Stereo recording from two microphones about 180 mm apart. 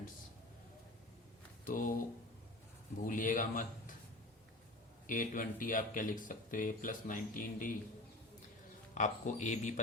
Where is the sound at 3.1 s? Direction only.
50° left (ahead or behind).